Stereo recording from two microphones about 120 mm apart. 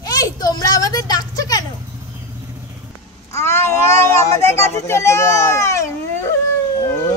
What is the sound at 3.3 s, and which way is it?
A child's voice, 20° left (ahead or behind).